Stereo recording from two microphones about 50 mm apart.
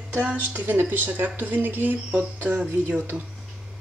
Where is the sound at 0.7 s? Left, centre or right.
Right.